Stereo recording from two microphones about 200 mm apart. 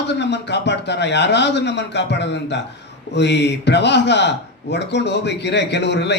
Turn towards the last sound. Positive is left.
turn(degrees=60)  # may be behind; listen again after turning